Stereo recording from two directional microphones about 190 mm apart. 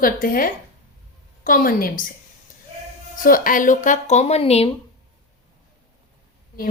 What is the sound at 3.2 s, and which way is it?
A woman's voice, 45° left (ahead or behind).